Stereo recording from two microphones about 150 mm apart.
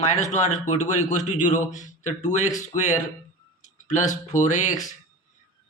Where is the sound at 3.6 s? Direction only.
55° left (ahead or behind).